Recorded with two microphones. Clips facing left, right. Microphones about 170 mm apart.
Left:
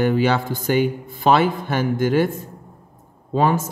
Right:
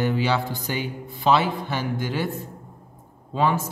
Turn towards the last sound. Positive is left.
turn(degrees=45)  # may be behind; listen again after turning